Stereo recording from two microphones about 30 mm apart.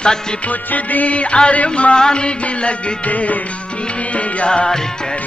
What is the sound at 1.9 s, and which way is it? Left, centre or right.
Music, left.